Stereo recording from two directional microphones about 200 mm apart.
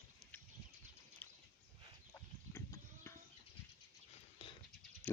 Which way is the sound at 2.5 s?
15° left (ahead or behind).